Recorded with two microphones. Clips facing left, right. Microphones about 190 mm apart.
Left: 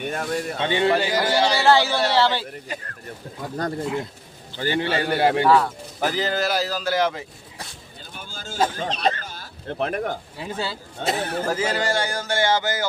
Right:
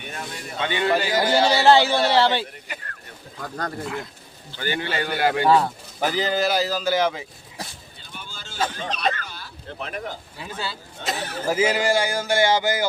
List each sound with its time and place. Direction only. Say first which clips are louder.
0.6 s a man's voice: left 1 dB; 30° left (ahead or behind)
1.3 s a man's voice: right 2 dB; 20° right (ahead or behind)
3.4 s a man's voice: left 3 dB; 25° left (ahead or behind)
5.4 s a man's voice: right 3 dB; 25° right (ahead or behind)
6.0 s speech: right 1 dB; centre (ahead or behind)
8.2 s a sound: left 4 dB; 45° left (ahead or behind)
9.0 s speech: left 1 dB; 45° left (ahead or behind)
10.3 s a man's voice: left 3 dB; 25° left (ahead or behind)
11.0 s a man's voice: left 5 dB; 55° left (ahead or behind)
11.4 s speech: right 6 dB; 10° right (ahead or behind)